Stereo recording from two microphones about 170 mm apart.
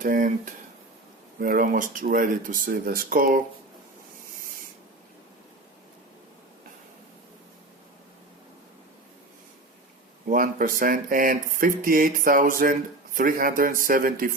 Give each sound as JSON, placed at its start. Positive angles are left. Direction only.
{"t": 0.0, "sound": "speech", "side_deg": -50}
{"t": 10.2, "sound": "speech", "side_deg": -55}